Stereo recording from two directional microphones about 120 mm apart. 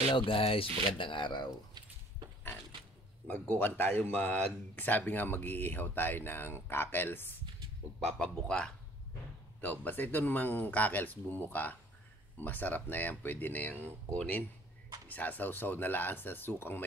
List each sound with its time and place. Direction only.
0.1 s speech: 45° left (ahead or behind)
3.3 s speech: 10° left (ahead or behind)
8.0 s speech: 5° left (ahead or behind)